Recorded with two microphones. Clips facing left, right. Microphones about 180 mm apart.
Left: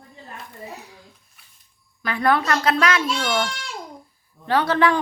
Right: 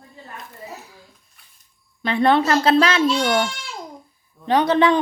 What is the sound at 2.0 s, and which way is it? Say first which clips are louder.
A woman's voice: right 4 dB; 25° right (ahead or behind).